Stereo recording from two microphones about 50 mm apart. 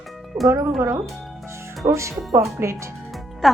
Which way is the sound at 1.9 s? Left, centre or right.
Right.